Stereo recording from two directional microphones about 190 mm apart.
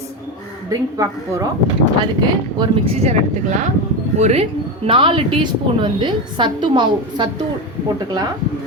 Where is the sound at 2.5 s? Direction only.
30° right (ahead or behind).